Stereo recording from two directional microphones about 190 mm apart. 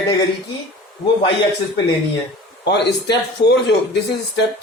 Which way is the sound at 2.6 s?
65° left (ahead or behind).